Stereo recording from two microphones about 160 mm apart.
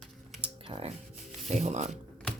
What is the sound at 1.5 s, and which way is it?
Speech, 45° right (ahead or behind).